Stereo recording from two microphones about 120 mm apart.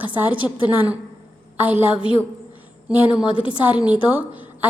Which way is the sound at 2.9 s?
10° right (ahead or behind).